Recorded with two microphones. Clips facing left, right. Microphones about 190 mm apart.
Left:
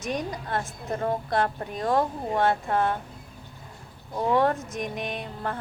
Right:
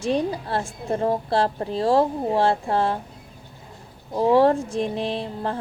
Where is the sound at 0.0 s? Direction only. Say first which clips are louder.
Right 7 dB; 30° right (ahead or behind).